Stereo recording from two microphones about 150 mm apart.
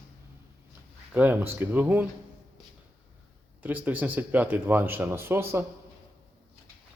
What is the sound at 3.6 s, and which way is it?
Speech, 10° right (ahead or behind).